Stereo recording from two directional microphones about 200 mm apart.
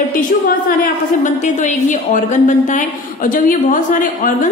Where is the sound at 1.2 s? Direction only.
40° left (ahead or behind).